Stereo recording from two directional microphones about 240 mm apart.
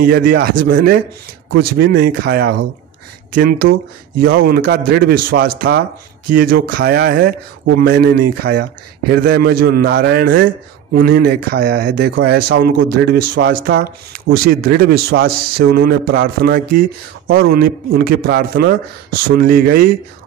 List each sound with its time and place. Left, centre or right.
0.0 s speech: right